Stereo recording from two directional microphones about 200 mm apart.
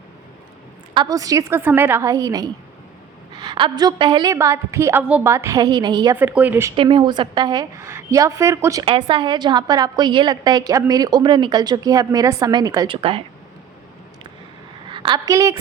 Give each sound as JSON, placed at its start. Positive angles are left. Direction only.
{"t": 0.9, "sound": "a woman's voice", "side_deg": -20}
{"t": 6.1, "sound": "a woman's voice", "side_deg": -5}
{"t": 6.7, "sound": "a woman's voice", "side_deg": -25}
{"t": 14.8, "sound": "a woman's voice", "side_deg": -25}